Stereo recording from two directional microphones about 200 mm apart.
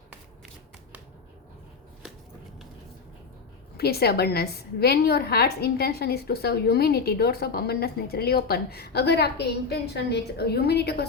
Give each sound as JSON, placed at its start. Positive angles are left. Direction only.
{"t": 3.8, "sound": "a woman's voice", "side_deg": 50}